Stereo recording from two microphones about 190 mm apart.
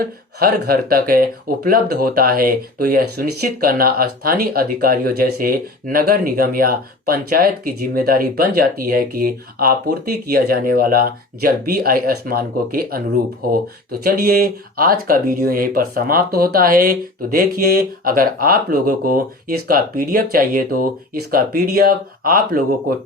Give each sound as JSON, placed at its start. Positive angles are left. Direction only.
{"t": 0.0, "sound": "speech", "side_deg": -50}